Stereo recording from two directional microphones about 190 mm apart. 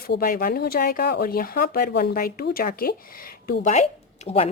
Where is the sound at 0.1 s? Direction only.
50° left (ahead or behind).